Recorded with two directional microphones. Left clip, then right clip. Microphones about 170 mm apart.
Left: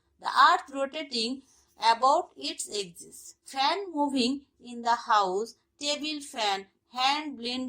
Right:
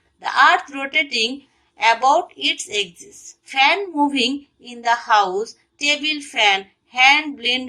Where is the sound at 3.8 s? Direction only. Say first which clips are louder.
Right 9 dB; 30° left (ahead or behind).